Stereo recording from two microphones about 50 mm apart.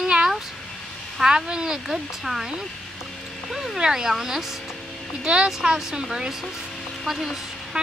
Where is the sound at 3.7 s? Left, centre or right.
Centre.